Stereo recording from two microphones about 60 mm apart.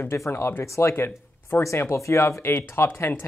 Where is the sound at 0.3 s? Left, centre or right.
Left.